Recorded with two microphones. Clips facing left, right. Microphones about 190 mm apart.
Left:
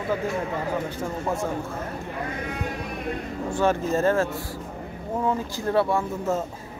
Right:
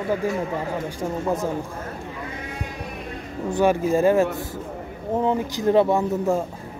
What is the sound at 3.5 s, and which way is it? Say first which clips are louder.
Speech: right 4 dB; 15° right (ahead or behind).